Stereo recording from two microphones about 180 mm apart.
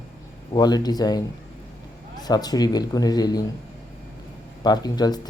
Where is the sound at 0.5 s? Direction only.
20° left (ahead or behind).